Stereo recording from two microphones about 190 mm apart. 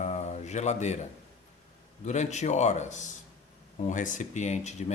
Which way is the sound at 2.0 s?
35° left (ahead or behind).